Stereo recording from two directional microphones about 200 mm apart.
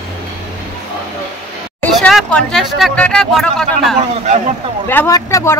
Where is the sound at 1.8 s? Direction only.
Centre (ahead or behind).